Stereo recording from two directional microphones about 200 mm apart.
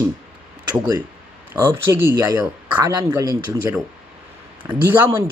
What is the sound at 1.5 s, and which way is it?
Speech, 10° right (ahead or behind).